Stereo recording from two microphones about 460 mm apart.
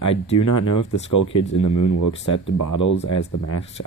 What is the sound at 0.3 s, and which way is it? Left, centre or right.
Speech, left.